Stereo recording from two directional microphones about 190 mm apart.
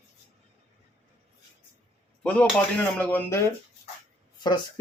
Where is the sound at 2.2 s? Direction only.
5° left (ahead or behind).